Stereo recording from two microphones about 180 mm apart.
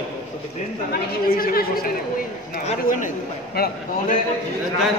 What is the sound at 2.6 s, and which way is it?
Speech, 45° left (ahead or behind).